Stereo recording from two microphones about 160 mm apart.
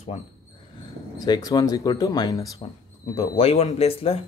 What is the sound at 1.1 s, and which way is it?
Speech, 25° left (ahead or behind).